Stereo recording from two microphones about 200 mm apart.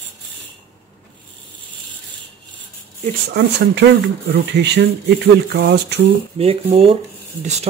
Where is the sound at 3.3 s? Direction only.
60° right (ahead or behind).